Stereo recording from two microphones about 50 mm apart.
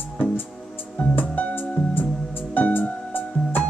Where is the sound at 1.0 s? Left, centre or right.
Left.